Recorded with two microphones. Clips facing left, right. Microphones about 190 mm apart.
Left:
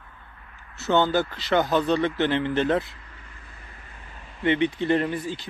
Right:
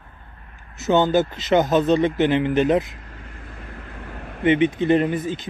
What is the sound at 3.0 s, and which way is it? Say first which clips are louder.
Vehicle: right 8 dB; 55° right (ahead or behind).